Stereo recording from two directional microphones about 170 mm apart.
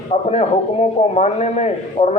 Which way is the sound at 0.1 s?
40° left (ahead or behind).